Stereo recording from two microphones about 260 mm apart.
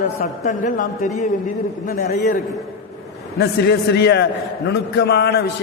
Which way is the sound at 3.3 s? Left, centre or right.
Left.